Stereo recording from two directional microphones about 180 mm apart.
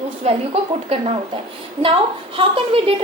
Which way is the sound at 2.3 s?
30° right (ahead or behind).